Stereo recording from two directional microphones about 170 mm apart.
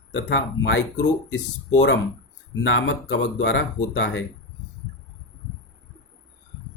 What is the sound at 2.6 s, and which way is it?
Speech, 90° left.